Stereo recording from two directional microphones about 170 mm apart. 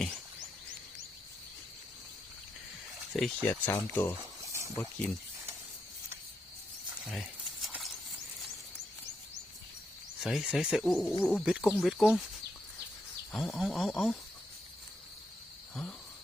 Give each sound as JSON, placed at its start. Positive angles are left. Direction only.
{"t": 3.1, "sound": "speech", "side_deg": 0}
{"t": 3.4, "sound": "speech", "side_deg": 10}
{"t": 4.4, "sound": "a sound", "side_deg": -15}
{"t": 4.7, "sound": "speech", "side_deg": 10}
{"t": 7.0, "sound": "a sound", "side_deg": 0}
{"t": 10.2, "sound": "speech", "side_deg": 0}
{"t": 13.3, "sound": "speech", "side_deg": 0}
{"t": 15.7, "sound": "cricket", "side_deg": 5}